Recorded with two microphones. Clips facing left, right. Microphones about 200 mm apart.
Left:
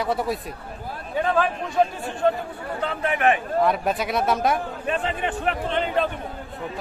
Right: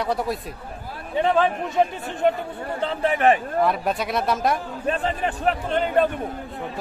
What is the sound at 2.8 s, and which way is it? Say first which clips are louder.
Speech: right 2 dB; 30° right (ahead or behind).